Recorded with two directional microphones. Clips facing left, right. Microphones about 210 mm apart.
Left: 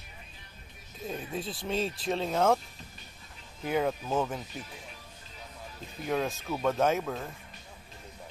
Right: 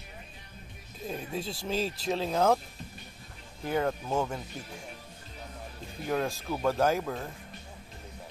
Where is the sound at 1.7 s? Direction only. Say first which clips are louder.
Even; centre (ahead or behind).